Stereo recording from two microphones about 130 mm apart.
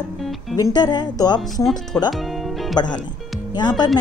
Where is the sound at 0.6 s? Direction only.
30° left (ahead or behind).